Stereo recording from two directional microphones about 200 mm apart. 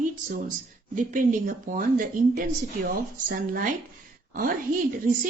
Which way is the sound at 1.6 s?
45° right (ahead or behind).